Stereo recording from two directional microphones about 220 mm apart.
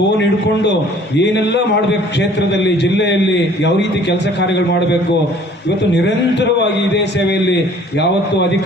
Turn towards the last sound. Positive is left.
turn(degrees=50)  # may be behind; listen again after turning